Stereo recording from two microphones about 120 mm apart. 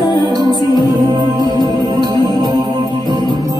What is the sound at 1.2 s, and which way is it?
Music, 35° right (ahead or behind).